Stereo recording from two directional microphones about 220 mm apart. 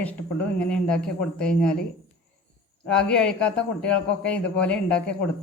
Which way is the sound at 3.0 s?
5° left (ahead or behind).